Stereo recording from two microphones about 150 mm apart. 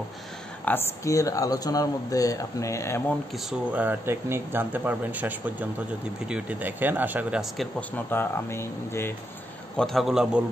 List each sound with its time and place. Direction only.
0.7 s speech: 20° left (ahead or behind)
3.7 s speech: 10° right (ahead or behind)
7.9 s speech: 15° left (ahead or behind)
9.8 s a man's voice: centre (ahead or behind)